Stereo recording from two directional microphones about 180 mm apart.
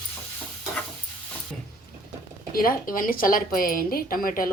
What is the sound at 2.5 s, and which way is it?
Speech, 50° left (ahead or behind).